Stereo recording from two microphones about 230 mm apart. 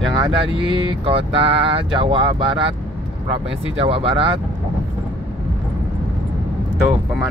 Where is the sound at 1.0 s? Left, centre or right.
Right.